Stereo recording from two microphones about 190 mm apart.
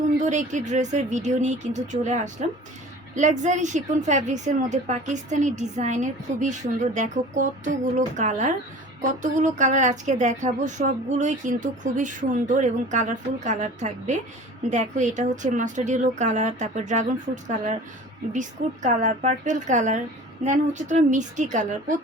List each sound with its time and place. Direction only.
0.2 s a woman's voice: 40° right (ahead or behind)